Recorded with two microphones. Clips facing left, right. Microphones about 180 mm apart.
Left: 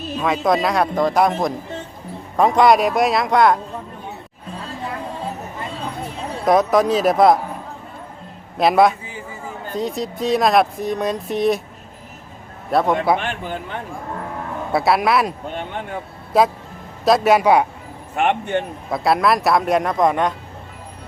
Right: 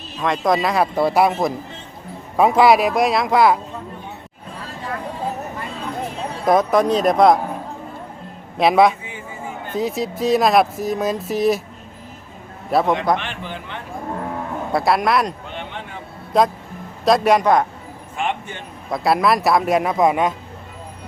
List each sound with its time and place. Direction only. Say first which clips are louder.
0.2 s speech: even; centre (ahead or behind)
6.4 s speech: even; centre (ahead or behind)
8.5 s speech: even; centre (ahead or behind)
12.7 s speech: even; centre (ahead or behind)
13.1 s a man's voice: left 3 dB; 45° left (ahead or behind)
14.7 s speech: left 1 dB; centre (ahead or behind)
15.4 s a sound: left 4 dB; 45° left (ahead or behind)
16.3 s speech: left 1 dB; 5° left (ahead or behind)
18.2 s speech: left 6 dB; 60° left (ahead or behind)
18.9 s speech: right 1 dB; centre (ahead or behind)